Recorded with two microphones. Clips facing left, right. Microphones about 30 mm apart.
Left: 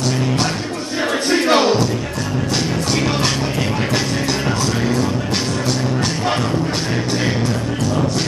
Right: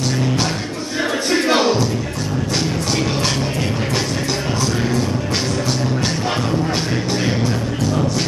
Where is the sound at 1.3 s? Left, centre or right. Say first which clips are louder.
Left 2 dB; centre.